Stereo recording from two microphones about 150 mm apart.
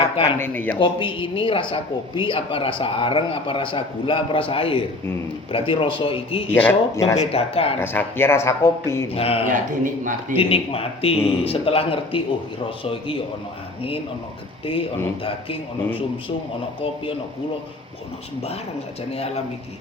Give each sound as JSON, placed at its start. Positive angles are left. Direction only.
{"t": 0.3, "sound": "speech", "side_deg": 15}
{"t": 0.8, "sound": "speech", "side_deg": 35}
{"t": 6.5, "sound": "speech", "side_deg": 10}
{"t": 7.2, "sound": "speech", "side_deg": 40}
{"t": 7.8, "sound": "speech", "side_deg": 15}
{"t": 9.1, "sound": "speech", "side_deg": 40}
{"t": 9.5, "sound": "a man's voice", "side_deg": -60}
{"t": 10.3, "sound": "speech", "side_deg": 40}
{"t": 14.7, "sound": "speech", "side_deg": 35}
{"t": 19.1, "sound": "a man's voice", "side_deg": 45}